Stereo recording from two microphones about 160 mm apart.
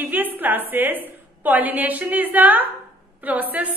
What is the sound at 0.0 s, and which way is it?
A woman's voice, 10° right (ahead or behind).